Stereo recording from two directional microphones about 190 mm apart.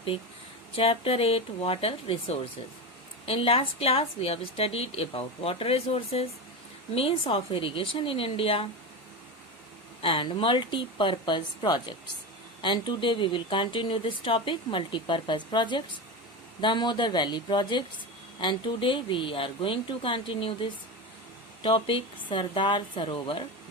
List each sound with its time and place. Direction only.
0.8 s a woman's voice: 30° left (ahead or behind)
10.0 s speech: 25° left (ahead or behind)